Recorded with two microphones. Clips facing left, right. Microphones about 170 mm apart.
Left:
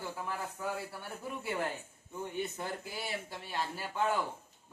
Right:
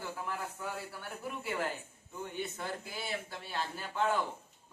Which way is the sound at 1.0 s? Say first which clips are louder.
Even; 15° left (ahead or behind).